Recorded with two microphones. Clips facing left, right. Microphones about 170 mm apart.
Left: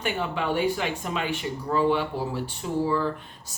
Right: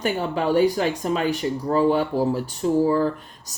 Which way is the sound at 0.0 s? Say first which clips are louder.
Right 5 dB; 40° right (ahead or behind).